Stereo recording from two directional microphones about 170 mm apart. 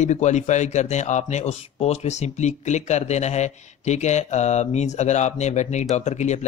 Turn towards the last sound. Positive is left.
turn(degrees=40)  # may be behind; listen again after turning